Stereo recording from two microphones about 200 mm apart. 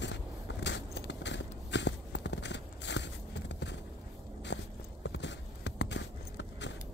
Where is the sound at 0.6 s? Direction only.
60° left (ahead or behind).